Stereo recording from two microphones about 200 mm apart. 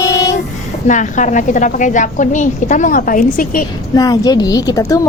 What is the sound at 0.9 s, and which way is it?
A woman's voice, 40° left (ahead or behind).